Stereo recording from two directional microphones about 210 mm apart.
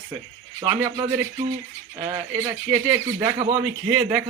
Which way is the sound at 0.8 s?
15° right (ahead or behind).